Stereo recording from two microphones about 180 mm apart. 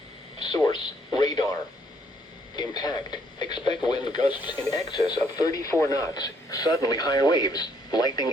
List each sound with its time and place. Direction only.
0.3 s radio: 25° left (ahead or behind)
2.6 s radio: 25° left (ahead or behind)
4.4 s speech: 10° right (ahead or behind)
4.7 s speech: 20° left (ahead or behind)